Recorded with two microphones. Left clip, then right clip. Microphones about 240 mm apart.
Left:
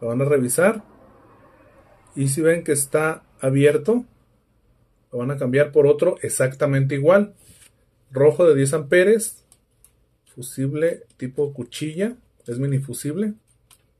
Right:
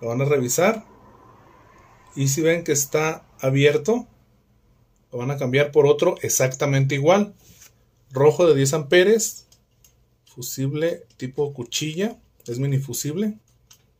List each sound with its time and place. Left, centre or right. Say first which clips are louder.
0.0 s speech: left 2 dB; centre
2.1 s speech: left 1 dB; centre
5.1 s speech: left 1 dB; centre
7.4 s a sound: right 3 dB; centre
8.1 s speech: left 1 dB; centre
10.4 s speech: left 2 dB; centre